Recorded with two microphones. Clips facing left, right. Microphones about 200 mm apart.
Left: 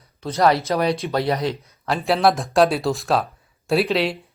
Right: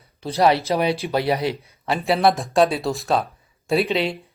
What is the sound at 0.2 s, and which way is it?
Speech, 30° right (ahead or behind).